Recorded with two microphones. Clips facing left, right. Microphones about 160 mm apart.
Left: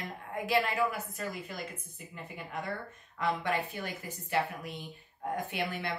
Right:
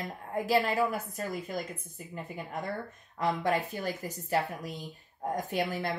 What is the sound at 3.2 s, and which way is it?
Speech, 40° right (ahead or behind).